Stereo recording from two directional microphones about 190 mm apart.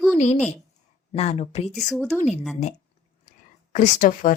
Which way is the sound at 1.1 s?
35° left (ahead or behind).